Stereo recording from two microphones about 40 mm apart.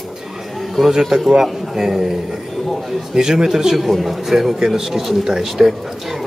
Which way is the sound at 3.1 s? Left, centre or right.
Centre.